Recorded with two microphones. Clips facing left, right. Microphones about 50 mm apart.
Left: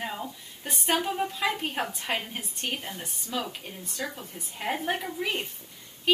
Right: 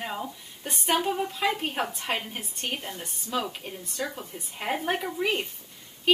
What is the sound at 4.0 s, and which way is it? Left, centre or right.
A woman's voice, centre.